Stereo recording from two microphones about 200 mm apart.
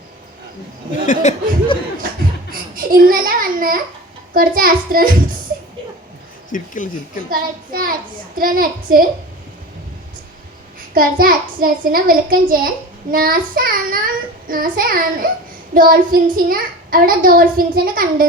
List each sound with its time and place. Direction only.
1.0 s speech: 40° left (ahead or behind)
2.5 s a sound: 45° right (ahead or behind)
4.4 s a child's voice: 45° right (ahead or behind)
6.5 s speech: 40° left (ahead or behind)
7.3 s a child's voice: 45° right (ahead or behind)
10.9 s a child's voice: 45° right (ahead or behind)